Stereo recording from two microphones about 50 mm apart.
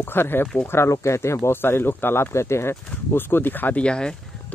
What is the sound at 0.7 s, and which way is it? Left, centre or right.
Speech, left.